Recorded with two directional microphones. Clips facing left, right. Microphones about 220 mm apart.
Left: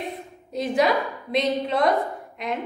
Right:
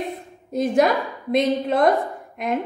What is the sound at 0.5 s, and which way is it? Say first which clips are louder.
A woman's voice: right 3 dB; 45° right (ahead or behind).